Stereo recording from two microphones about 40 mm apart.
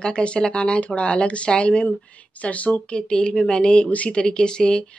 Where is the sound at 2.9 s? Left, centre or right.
Left.